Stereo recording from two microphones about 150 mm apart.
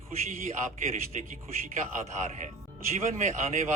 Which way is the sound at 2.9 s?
50° right (ahead or behind).